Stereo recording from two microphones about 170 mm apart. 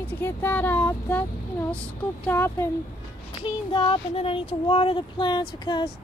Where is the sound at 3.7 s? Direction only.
30° left (ahead or behind).